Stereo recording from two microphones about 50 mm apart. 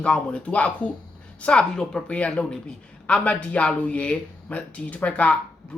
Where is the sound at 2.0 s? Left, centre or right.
Left.